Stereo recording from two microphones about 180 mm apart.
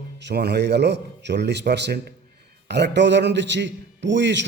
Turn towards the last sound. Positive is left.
turn(degrees=-80)